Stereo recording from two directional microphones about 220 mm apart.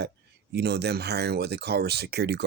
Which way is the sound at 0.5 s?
50° right (ahead or behind).